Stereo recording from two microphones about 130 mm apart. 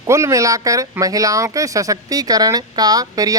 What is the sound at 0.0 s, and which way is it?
Speech, 25° right (ahead or behind).